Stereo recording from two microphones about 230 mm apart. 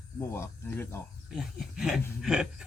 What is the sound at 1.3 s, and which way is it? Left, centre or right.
Speech, centre.